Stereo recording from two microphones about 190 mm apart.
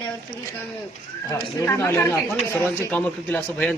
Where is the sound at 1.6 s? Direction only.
15° left (ahead or behind).